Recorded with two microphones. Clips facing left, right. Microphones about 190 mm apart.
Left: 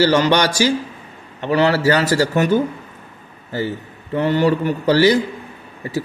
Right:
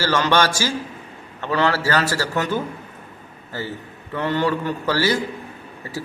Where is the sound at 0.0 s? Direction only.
15° left (ahead or behind).